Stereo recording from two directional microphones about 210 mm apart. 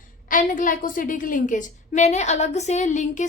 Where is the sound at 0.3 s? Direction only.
40° left (ahead or behind).